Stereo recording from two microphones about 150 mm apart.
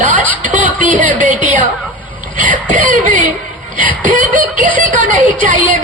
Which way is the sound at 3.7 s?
65° right (ahead or behind).